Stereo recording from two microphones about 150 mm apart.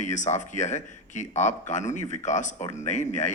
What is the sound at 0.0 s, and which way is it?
Speech, 55° left (ahead or behind).